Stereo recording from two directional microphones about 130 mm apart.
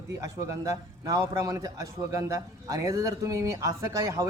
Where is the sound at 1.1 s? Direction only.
25° right (ahead or behind).